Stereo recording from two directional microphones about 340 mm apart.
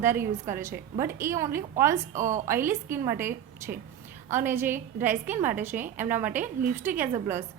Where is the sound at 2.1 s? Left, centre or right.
Right.